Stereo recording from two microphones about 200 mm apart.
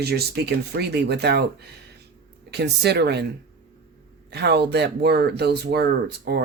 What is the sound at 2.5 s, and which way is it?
Speech, 55° right (ahead or behind).